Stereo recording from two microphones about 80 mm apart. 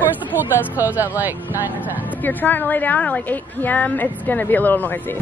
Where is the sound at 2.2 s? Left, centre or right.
Left.